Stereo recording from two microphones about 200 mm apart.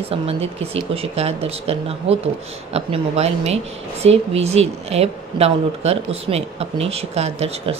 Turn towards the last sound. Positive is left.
turn(degrees=-30)  # may be behind; listen again after turning